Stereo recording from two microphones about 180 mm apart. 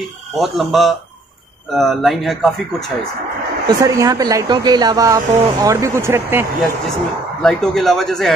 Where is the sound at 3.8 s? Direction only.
20° right (ahead or behind).